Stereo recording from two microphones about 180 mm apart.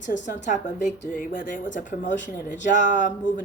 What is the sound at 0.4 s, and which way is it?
Speech, 45° left (ahead or behind).